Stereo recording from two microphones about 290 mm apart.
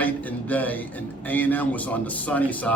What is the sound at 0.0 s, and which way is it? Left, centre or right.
Speech, centre.